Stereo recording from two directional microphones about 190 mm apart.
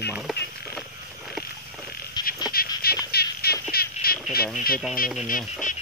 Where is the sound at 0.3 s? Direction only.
Centre (ahead or behind).